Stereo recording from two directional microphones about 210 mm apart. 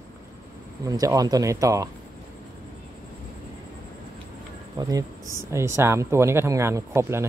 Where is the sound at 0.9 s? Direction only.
15° right (ahead or behind).